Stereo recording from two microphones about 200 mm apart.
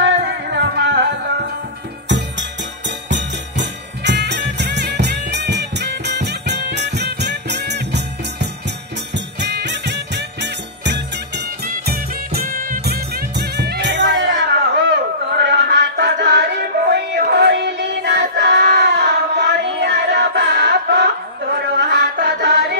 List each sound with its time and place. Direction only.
0.0 s music: 60° right (ahead or behind)
3.1 s music: 60° right (ahead or behind)